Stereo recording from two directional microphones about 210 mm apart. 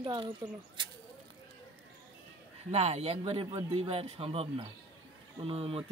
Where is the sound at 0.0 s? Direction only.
20° right (ahead or behind).